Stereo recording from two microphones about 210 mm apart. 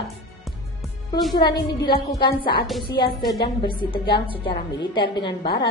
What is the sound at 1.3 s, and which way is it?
A woman's voice, 20° left (ahead or behind).